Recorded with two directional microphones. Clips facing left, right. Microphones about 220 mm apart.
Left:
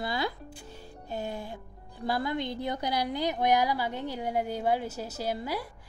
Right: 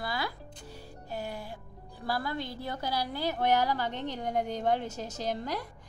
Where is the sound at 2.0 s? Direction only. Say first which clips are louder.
Left 4 dB; 20° left (ahead or behind).